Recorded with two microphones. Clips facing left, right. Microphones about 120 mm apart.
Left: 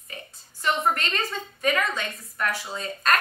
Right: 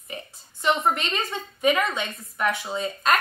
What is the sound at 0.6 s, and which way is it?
A woman's voice, 15° right (ahead or behind).